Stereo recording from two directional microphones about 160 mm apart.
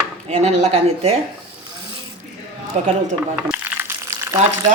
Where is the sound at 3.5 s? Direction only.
15° right (ahead or behind).